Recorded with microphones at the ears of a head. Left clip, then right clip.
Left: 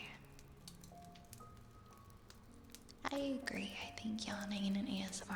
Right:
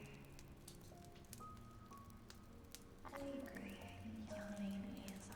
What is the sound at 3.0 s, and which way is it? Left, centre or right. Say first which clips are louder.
Music: left 9 dB; left.